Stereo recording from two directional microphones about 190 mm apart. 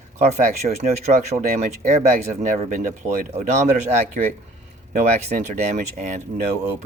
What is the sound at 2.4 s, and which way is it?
Speech, 45° right (ahead or behind).